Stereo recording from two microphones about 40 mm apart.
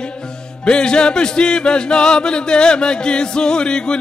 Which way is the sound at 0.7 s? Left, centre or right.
Left.